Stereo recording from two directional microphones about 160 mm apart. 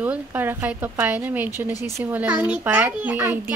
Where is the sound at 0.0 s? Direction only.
10° right (ahead or behind).